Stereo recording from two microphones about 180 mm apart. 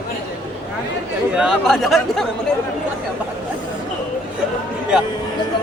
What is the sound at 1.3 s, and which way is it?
Speech, 5° right (ahead or behind).